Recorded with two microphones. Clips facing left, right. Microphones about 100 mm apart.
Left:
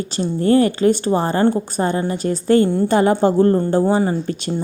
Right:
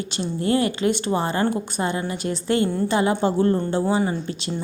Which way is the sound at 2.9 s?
45° left (ahead or behind).